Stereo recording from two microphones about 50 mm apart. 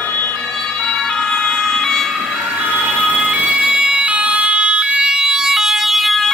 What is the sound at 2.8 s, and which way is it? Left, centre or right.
Ambulance, right.